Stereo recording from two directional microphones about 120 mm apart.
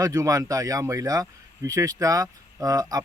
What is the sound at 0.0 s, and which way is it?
Speech, 30° right (ahead or behind).